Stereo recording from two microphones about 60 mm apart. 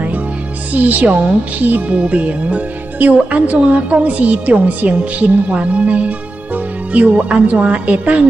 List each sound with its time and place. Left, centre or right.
0.7 s speech: right